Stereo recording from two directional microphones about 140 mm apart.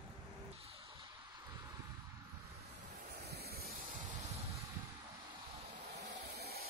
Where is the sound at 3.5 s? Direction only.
90° right.